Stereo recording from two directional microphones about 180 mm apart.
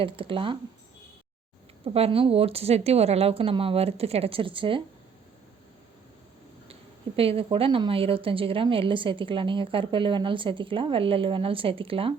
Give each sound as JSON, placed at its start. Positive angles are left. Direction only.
{"t": 0.0, "sound": "a woman's voice", "side_deg": -30}
{"t": 1.8, "sound": "speech", "side_deg": -30}
{"t": 7.2, "sound": "a woman's voice", "side_deg": -30}